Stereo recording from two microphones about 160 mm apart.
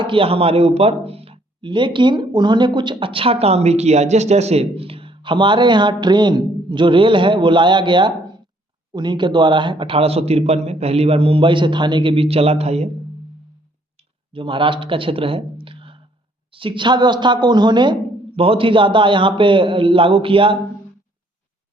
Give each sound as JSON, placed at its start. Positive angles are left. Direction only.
{"t": 0.0, "sound": "speech", "side_deg": -35}
{"t": 14.3, "sound": "speech", "side_deg": -30}